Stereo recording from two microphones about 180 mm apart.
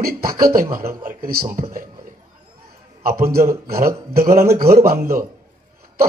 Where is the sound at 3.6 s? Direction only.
55° right (ahead or behind).